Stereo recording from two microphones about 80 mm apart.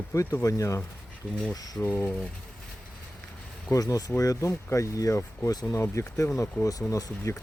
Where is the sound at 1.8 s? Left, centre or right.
Left.